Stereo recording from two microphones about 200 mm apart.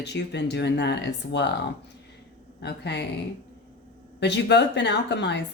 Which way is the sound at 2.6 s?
55° left (ahead or behind).